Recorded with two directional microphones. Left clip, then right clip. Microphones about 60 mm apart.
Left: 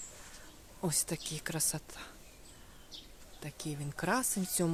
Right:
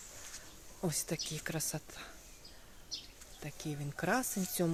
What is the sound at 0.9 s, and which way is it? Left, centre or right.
Speech, centre.